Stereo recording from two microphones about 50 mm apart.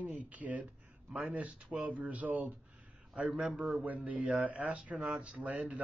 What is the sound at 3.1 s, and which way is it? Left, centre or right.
A man's voice, right.